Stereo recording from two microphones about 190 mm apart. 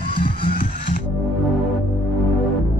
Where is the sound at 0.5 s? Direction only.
50° left (ahead or behind).